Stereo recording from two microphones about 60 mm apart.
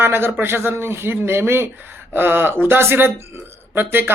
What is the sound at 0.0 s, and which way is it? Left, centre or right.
Speech, right.